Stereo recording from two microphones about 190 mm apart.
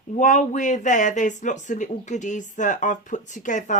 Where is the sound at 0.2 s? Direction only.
40° left (ahead or behind).